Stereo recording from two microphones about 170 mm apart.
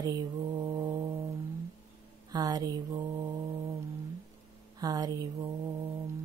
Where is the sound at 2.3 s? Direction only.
20° right (ahead or behind).